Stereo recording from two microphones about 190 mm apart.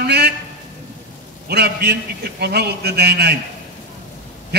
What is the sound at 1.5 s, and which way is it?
A man's voice, 60° right (ahead or behind).